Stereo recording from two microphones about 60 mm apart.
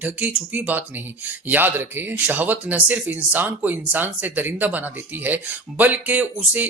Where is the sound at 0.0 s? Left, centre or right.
Right.